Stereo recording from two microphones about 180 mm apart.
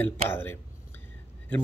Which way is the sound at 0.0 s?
10° left (ahead or behind).